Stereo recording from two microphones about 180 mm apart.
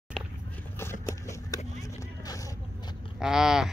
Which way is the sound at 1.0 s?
15° left (ahead or behind).